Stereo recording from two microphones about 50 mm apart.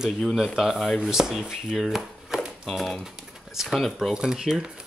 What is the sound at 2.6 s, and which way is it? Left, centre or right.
Speech, centre.